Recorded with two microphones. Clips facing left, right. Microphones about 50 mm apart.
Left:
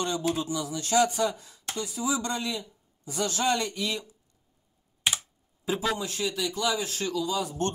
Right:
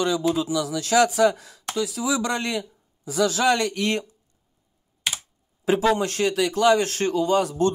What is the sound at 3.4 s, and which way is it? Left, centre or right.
Speech, right.